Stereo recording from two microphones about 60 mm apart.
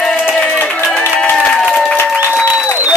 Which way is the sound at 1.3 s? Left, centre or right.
Centre.